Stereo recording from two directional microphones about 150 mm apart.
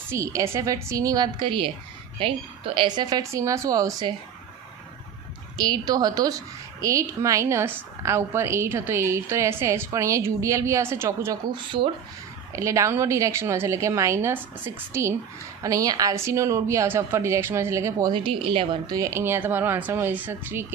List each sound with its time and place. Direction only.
0.1 s a woman's voice: 20° right (ahead or behind)
5.5 s a woman's voice: 25° right (ahead or behind)
11.4 s a woman's voice: 30° right (ahead or behind)
12.5 s a woman's voice: 20° right (ahead or behind)
18.1 s a woman's voice: 35° right (ahead or behind)
18.9 s a woman's voice: 20° right (ahead or behind)